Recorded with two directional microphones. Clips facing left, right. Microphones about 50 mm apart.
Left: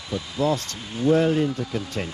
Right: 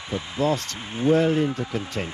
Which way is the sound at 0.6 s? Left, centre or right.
Right.